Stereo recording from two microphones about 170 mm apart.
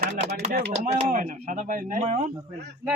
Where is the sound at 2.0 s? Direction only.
40° right (ahead or behind).